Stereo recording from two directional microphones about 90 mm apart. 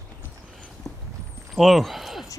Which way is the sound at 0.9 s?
20° left (ahead or behind).